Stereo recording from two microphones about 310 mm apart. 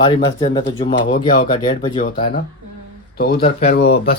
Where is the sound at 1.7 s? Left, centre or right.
Centre.